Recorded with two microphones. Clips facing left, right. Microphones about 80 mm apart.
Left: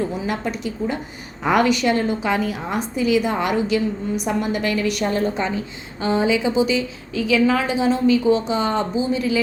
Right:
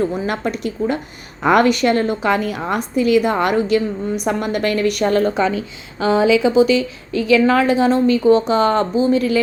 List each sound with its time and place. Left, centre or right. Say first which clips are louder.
0.1 s a woman's voice: right 3 dB; right